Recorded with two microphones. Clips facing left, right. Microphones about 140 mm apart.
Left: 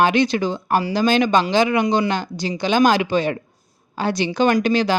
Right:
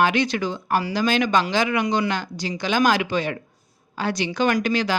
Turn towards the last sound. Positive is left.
turn(degrees=25)  # may be behind; listen again after turning